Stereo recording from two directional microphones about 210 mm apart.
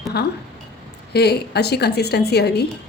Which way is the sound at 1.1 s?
50° left (ahead or behind).